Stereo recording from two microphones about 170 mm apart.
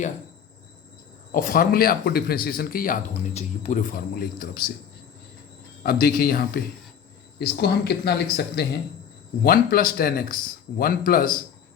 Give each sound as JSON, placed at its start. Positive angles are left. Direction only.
{"t": 1.3, "sound": "speech", "side_deg": 55}
{"t": 3.3, "sound": "speech", "side_deg": 45}
{"t": 5.8, "sound": "speech", "side_deg": 60}
{"t": 7.3, "sound": "speech", "side_deg": 70}
{"t": 9.4, "sound": "speech", "side_deg": 60}